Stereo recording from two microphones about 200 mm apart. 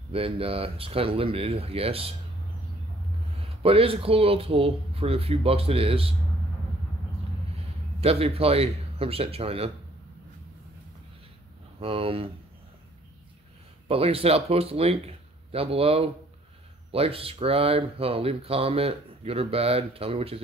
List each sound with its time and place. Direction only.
0.1 s speech: 30° right (ahead or behind)
3.3 s speech: 30° right (ahead or behind)
8.0 s speech: 30° right (ahead or behind)
11.8 s speech: 30° right (ahead or behind)
13.8 s speech: 30° right (ahead or behind)